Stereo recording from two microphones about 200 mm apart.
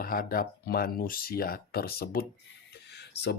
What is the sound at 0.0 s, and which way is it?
Speech, 45° left (ahead or behind).